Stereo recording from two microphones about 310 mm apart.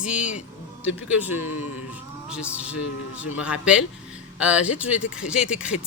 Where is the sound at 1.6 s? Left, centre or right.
Left.